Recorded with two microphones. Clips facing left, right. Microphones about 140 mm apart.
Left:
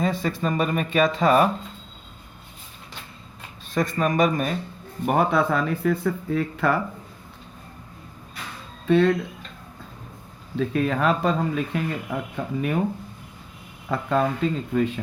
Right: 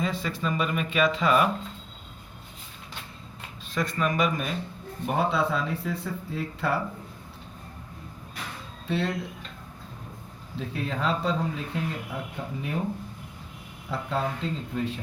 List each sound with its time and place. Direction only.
0.0 s speech: 45° left (ahead or behind)
3.8 s a man's voice: 45° left (ahead or behind)
5.4 s speech: 75° left (ahead or behind)
8.9 s speech: 90° left
10.6 s speech: 90° left; by 11.3 s 55° left (ahead or behind)
11.3 s speech: 75° left (ahead or behind)
13.8 s speech: 75° left (ahead or behind)